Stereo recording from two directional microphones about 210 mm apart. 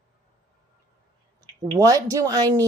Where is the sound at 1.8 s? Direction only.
15° right (ahead or behind).